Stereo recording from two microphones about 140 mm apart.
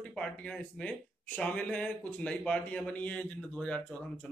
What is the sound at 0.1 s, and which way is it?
Speech, 5° left (ahead or behind).